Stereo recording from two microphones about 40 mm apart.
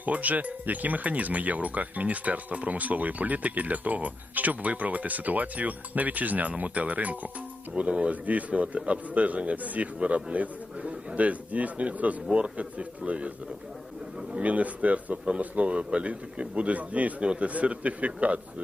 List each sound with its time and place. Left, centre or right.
0.0 s speech: right
14.4 s speech: right